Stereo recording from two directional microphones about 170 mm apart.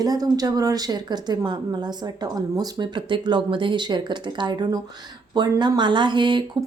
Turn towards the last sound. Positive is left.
turn(degrees=-25)  # may be behind; listen again after turning